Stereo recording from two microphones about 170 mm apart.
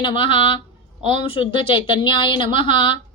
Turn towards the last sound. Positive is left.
turn(degrees=30)  # may be behind; listen again after turning